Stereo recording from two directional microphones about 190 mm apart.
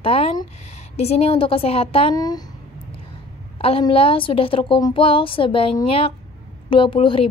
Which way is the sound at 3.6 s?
30° left (ahead or behind).